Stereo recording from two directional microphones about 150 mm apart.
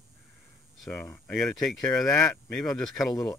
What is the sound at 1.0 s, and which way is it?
Speech, 15° left (ahead or behind).